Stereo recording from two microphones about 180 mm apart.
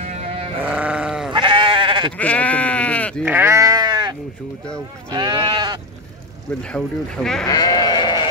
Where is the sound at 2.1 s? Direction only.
10° left (ahead or behind).